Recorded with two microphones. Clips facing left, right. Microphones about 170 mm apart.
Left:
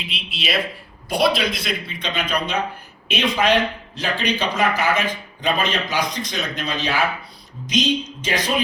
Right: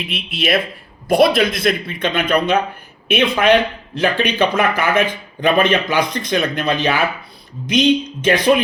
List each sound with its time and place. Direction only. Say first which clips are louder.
0.1 s speech: right 7 dB; 55° right (ahead or behind)